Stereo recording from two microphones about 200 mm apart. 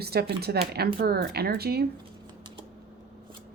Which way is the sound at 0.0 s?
55° right (ahead or behind).